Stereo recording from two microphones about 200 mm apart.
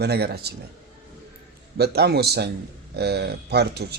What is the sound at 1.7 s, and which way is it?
Speech, 55° right (ahead or behind).